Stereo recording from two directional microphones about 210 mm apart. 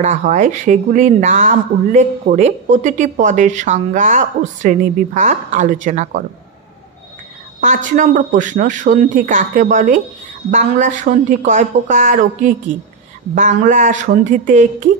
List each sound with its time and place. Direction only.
0.0 s speech: 35° right (ahead or behind)
7.6 s speech: 35° right (ahead or behind)